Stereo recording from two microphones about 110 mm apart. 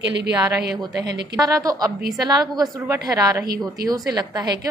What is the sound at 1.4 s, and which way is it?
Speech, 30° right (ahead or behind).